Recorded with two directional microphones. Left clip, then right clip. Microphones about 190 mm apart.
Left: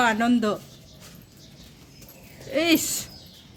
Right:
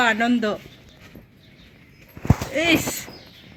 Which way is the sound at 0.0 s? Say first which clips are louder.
Right 2 dB; 15° right (ahead or behind).